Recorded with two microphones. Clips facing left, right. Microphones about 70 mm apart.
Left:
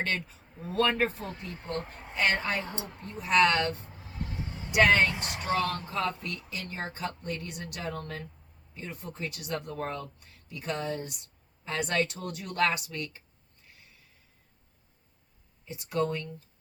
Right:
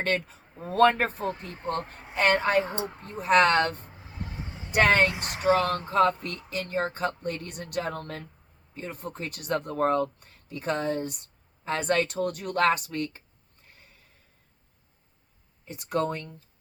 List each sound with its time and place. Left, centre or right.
0.0 s speech: right
5.4 s speech: right
5.9 s speech: right
15.6 s speech: right